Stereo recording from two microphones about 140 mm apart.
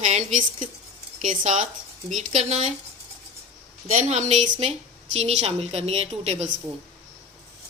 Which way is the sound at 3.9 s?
55° right (ahead or behind).